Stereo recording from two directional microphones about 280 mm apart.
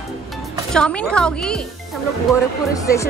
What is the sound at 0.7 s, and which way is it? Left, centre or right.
Speech, centre.